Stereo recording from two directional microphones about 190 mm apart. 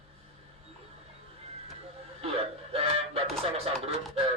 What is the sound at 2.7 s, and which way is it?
Music, 30° right (ahead or behind).